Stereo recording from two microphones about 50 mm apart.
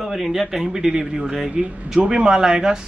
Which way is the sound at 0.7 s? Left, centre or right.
Centre.